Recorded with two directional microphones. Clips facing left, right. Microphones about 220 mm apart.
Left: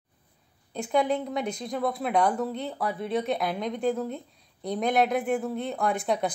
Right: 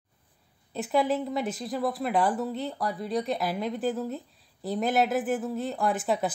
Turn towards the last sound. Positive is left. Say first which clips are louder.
# even
turn(degrees=-5)  # may be behind; listen again after turning